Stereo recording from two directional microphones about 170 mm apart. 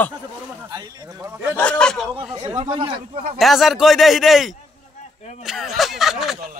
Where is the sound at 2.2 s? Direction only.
30° right (ahead or behind).